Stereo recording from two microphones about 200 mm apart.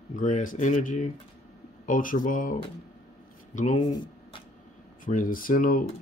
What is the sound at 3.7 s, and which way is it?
Speech, 20° left (ahead or behind).